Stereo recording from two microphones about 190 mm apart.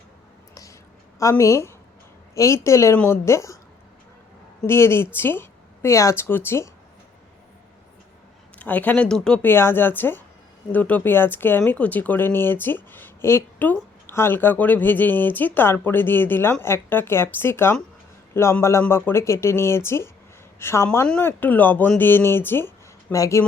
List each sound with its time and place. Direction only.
1.2 s speech: 15° left (ahead or behind)
4.6 s speech: 15° left (ahead or behind)
8.5 s speech: 10° left (ahead or behind)